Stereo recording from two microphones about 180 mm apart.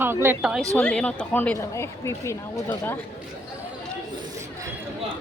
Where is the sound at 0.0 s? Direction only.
15° right (ahead or behind).